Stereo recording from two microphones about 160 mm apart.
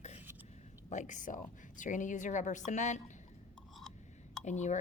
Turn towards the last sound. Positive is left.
turn(degrees=50)  # may be behind; listen again after turning